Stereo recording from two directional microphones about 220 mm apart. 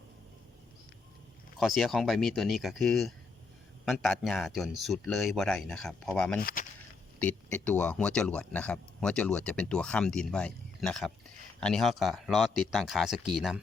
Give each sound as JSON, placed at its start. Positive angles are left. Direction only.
{"t": 1.5, "sound": "speech", "side_deg": 0}
{"t": 6.4, "sound": "speech", "side_deg": 40}
{"t": 7.2, "sound": "speech", "side_deg": 5}